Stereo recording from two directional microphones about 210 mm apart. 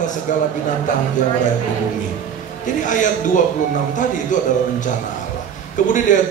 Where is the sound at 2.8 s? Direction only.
35° left (ahead or behind).